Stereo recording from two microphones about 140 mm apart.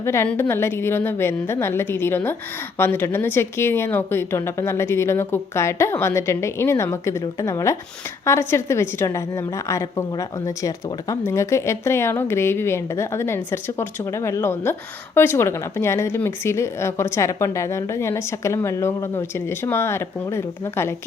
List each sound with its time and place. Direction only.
0.0 s a woman's voice: 20° left (ahead or behind)